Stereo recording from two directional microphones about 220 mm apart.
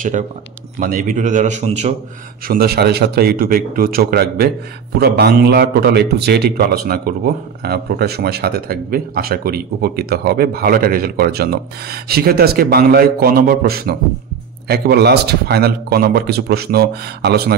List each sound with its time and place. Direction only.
0.7 s a man's voice: 40° right (ahead or behind)
2.4 s a man's voice: 45° right (ahead or behind)